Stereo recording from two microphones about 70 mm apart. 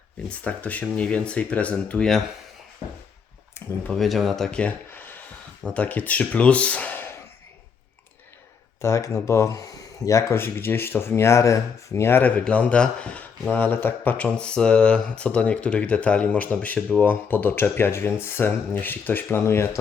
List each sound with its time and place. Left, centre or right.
0.3 s speech: left
3.9 s speech: centre
4.9 s a sound: left
5.6 s speech: centre
8.8 s speech: left
10.4 s speech: left; by 13.2 s centre
13.5 s speech: left